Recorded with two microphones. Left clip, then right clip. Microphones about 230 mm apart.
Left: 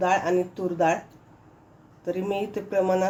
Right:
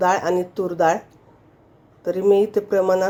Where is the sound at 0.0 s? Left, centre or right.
Right.